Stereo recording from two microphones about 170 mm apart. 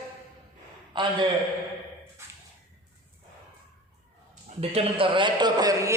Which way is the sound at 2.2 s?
15° right (ahead or behind).